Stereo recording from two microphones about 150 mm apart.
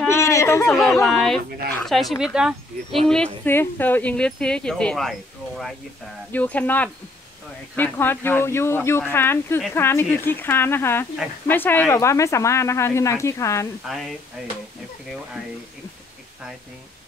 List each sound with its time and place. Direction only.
0.0 s a sound: 20° left (ahead or behind)
0.7 s speech: centre (ahead or behind)
3.4 s speech: 15° left (ahead or behind)
6.3 s speech: 10° left (ahead or behind)
13.8 s speech: centre (ahead or behind)